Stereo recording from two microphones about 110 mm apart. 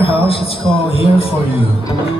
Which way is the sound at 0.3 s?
60° left (ahead or behind).